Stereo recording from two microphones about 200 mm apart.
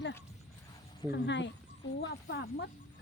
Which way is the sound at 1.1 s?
60° left (ahead or behind).